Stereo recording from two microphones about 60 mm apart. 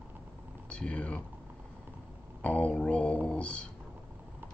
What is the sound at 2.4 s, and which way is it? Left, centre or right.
Speech, left.